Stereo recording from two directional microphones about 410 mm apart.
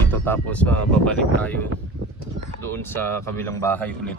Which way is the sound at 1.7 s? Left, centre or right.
Right.